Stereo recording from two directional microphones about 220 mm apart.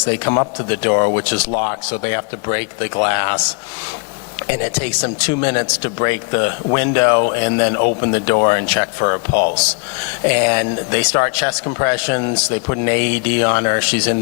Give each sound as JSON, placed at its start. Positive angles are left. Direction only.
{"t": 0.3, "sound": "a man's voice", "side_deg": 25}
{"t": 5.2, "sound": "a man's voice", "side_deg": 15}
{"t": 9.6, "sound": "speech", "side_deg": 10}